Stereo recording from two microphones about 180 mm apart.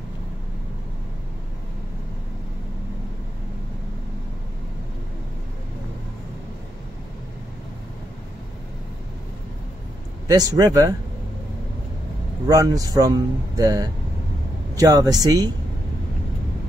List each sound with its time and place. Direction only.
10.2 s speech: 20° right (ahead or behind)
12.4 s speech: 20° right (ahead or behind)